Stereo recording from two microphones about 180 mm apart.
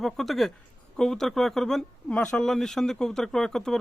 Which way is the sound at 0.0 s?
Centre (ahead or behind).